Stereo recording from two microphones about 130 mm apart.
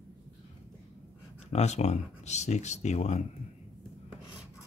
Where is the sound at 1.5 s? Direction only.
60° left (ahead or behind).